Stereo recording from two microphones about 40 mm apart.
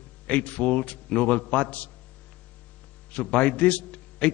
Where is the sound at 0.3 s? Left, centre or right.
Left.